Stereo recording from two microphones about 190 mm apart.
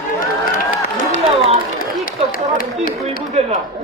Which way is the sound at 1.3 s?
30° right (ahead or behind).